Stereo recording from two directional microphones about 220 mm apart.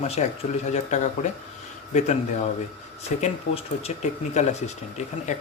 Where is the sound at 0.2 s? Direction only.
30° left (ahead or behind).